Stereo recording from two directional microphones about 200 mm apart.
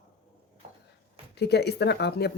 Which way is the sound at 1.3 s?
55° left (ahead or behind).